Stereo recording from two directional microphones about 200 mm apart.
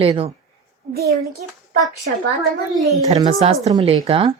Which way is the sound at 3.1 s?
25° right (ahead or behind).